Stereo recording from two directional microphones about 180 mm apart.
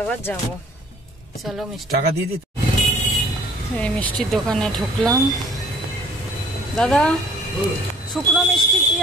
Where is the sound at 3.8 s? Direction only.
5° left (ahead or behind).